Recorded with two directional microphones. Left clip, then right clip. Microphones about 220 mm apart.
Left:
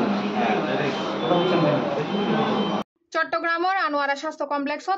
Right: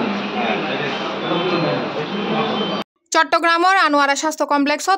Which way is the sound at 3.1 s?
40° right (ahead or behind).